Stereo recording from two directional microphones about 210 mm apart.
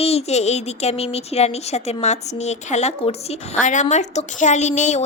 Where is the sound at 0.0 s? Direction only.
30° left (ahead or behind).